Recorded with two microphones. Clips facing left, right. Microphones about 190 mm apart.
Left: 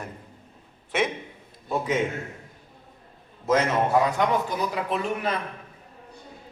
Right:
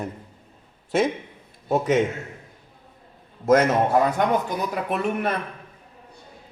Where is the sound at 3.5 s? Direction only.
50° right (ahead or behind).